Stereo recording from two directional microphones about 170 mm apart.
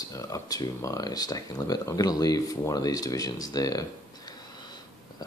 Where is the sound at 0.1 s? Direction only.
20° left (ahead or behind).